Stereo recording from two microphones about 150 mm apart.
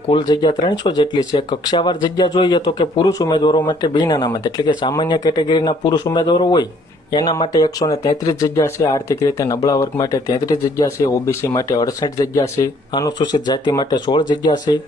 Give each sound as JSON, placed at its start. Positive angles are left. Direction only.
{"t": 0.1, "sound": "speech", "side_deg": 30}